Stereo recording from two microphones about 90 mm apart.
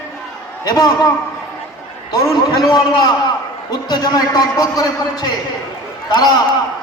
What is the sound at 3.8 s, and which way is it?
A man's voice, 50° left (ahead or behind).